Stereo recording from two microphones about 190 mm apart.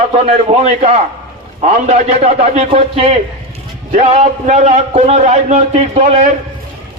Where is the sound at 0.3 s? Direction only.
35° right (ahead or behind).